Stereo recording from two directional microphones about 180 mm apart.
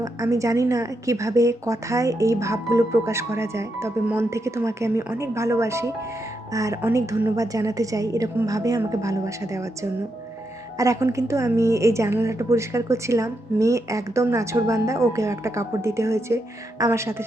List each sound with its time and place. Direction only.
0.0 s a woman's voice: 20° right (ahead or behind)
10.8 s a woman's voice: 15° right (ahead or behind)